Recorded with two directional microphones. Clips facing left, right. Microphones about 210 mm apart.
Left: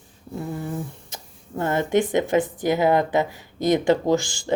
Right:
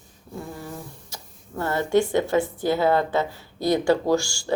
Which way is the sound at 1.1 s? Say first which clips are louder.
Left 2 dB; 20° left (ahead or behind).